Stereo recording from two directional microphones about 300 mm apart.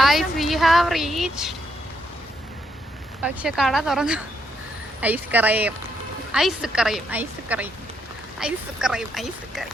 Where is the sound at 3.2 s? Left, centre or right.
Centre.